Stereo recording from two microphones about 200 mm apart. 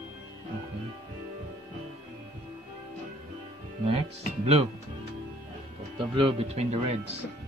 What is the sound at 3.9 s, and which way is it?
Speech, 30° right (ahead or behind).